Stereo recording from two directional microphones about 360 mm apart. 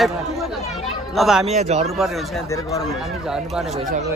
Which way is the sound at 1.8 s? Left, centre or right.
Centre.